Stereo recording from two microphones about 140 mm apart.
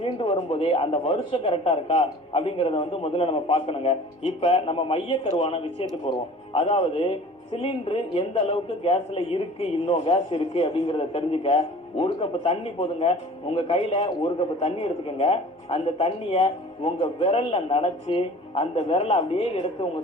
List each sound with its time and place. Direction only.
0.0 s speech: 40° left (ahead or behind)